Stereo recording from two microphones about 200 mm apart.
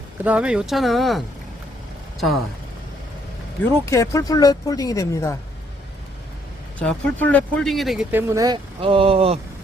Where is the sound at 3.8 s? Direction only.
15° left (ahead or behind).